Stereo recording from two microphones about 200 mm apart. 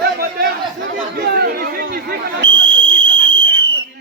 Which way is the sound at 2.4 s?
70° right (ahead or behind).